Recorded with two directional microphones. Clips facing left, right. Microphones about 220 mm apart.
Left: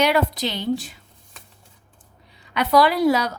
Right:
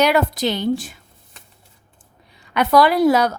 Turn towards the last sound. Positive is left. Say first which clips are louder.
# right 3 dB
turn(degrees=-50)  # may be behind; listen again after turning